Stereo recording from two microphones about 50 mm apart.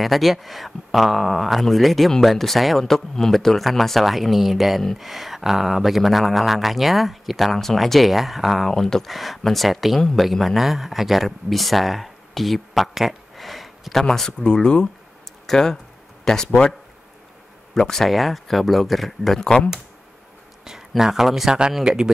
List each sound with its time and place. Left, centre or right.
0.0 s speech: centre
9.0 s speech: centre
14.4 s speech: centre
17.7 s speech: centre
20.6 s speech: centre